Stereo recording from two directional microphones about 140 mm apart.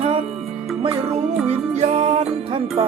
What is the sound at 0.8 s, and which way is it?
Music, 50° right (ahead or behind).